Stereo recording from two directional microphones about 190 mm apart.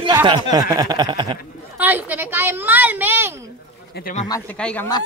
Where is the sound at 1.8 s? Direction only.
10° right (ahead or behind).